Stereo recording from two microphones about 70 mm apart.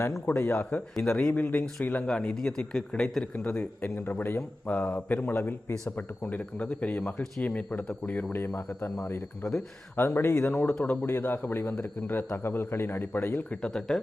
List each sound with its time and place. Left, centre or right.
0.3 s a man's voice: left
0.9 s a man's voice: centre
1.3 s a man's voice: left
2.0 s a man's voice: centre
3.3 s a man's voice: left
9.4 s speech: centre
10.2 s a man's voice: left
10.8 s a man's voice: centre
11.0 s a man's voice: left
12.4 s a man's voice: left
13.5 s a man's voice: centre